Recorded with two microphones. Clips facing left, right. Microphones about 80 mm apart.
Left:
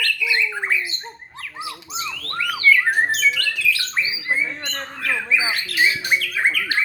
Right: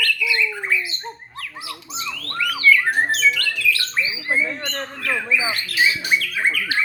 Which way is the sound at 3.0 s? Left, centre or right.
Centre.